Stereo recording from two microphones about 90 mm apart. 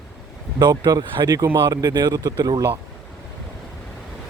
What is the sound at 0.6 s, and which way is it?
Speech, 50° right (ahead or behind).